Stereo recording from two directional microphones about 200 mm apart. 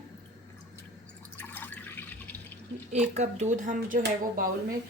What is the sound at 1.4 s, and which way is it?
Drip, 10° left (ahead or behind).